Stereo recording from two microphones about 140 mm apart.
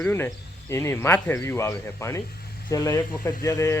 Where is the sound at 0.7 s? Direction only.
20° left (ahead or behind).